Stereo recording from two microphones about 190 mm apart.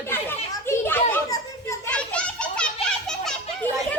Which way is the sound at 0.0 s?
10° left (ahead or behind).